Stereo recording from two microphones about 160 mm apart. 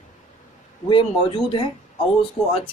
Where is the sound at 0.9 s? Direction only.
35° left (ahead or behind).